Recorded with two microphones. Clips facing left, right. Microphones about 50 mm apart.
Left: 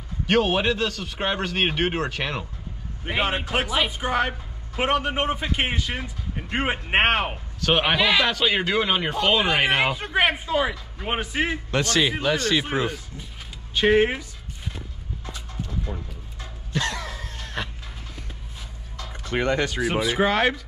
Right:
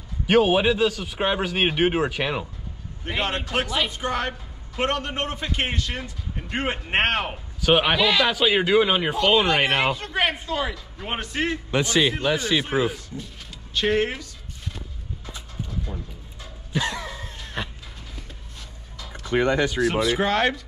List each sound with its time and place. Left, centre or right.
0.3 s a man's voice: centre
3.1 s a woman's voice: centre
7.6 s a man's voice: centre
9.9 s a woman's voice: centre
11.7 s speech: centre
13.7 s a woman's voice: centre
15.9 s a man's voice: centre
16.7 s cough: centre
19.9 s a woman's voice: centre